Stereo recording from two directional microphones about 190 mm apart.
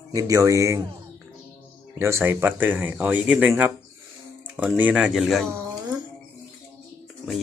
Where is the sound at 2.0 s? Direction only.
15° right (ahead or behind).